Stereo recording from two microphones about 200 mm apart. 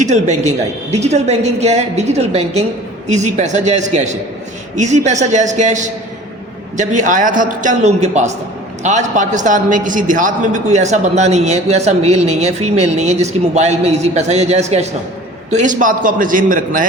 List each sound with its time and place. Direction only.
0.0 s a man's voice: 35° right (ahead or behind)